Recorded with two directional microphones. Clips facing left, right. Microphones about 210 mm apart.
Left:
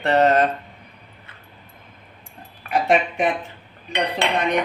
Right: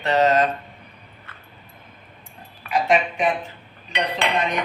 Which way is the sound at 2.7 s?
60° left (ahead or behind).